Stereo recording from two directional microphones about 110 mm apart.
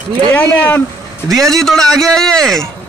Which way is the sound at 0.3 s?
15° left (ahead or behind).